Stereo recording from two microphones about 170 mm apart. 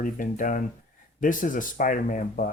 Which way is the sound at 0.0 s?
50° left (ahead or behind).